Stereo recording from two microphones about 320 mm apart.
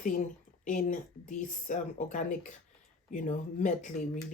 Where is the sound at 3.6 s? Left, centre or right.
Left.